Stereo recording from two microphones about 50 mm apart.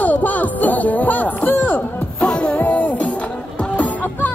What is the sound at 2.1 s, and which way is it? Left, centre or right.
Music, left.